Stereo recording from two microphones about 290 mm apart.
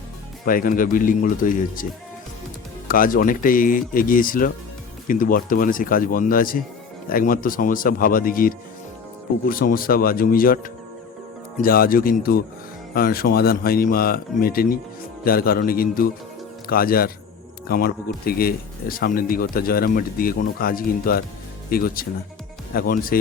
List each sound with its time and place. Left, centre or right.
0.4 s speech: left